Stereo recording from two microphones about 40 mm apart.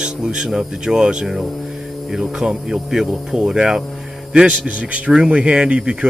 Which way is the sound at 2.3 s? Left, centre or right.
Centre.